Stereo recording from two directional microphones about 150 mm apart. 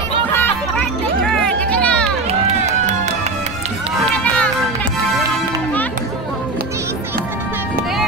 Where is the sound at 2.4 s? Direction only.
50° right (ahead or behind).